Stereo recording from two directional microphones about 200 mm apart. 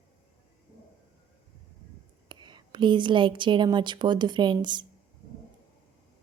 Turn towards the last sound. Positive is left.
turn(degrees=-20)  # may be behind; listen again after turning